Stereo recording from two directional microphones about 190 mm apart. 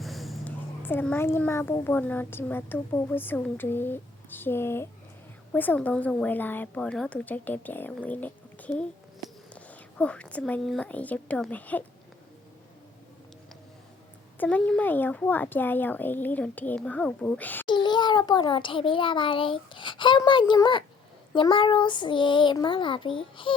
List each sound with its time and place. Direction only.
0.0 s a sound: centre (ahead or behind)
0.8 s a child's voice: 10° left (ahead or behind)
14.3 s a child's voice: 10° left (ahead or behind)
17.7 s a child's voice: 25° left (ahead or behind)